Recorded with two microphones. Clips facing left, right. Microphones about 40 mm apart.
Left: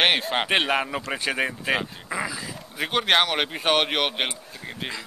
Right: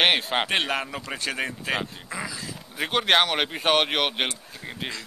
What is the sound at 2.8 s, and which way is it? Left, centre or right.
Speech, centre.